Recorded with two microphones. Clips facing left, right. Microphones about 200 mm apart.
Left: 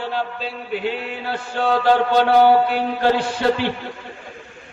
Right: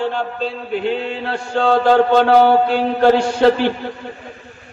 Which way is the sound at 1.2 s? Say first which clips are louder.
Right 4 dB; 55° right (ahead or behind).